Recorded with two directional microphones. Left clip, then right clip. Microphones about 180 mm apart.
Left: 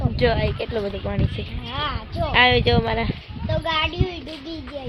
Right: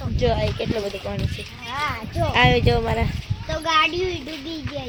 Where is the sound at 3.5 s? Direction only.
60° right (ahead or behind).